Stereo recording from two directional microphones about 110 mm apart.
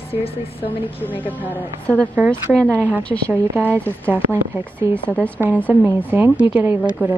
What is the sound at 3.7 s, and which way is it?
Speech, 15° left (ahead or behind).